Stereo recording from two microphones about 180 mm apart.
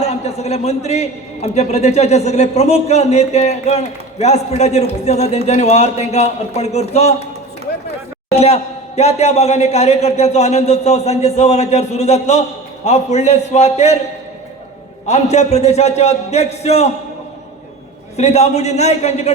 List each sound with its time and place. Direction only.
0.0 s a man's voice: 35° left (ahead or behind)
9.0 s a man's voice: 35° left (ahead or behind)
15.0 s a man's voice: 40° left (ahead or behind)
18.2 s a man's voice: 35° left (ahead or behind)